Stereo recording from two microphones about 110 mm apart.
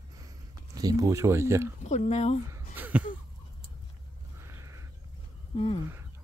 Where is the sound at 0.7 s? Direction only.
35° right (ahead or behind).